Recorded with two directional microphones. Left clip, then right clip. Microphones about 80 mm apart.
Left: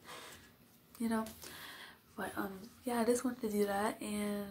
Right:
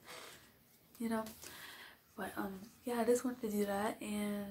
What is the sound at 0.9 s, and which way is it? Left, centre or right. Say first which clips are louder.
A woman's voice: left 2 dB; left.